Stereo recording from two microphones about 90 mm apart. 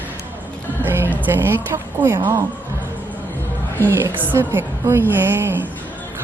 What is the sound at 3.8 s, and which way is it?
A woman's voice, 25° right (ahead or behind).